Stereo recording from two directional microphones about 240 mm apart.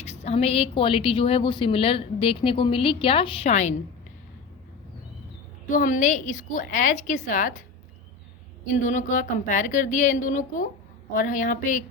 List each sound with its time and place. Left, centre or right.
0.0 s a woman's voice: left
5.7 s a woman's voice: left
8.8 s a woman's voice: left